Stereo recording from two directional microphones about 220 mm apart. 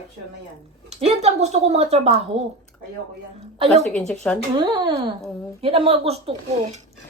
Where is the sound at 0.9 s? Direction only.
30° right (ahead or behind).